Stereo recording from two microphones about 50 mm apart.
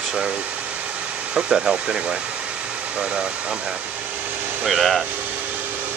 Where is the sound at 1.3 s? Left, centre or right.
Centre.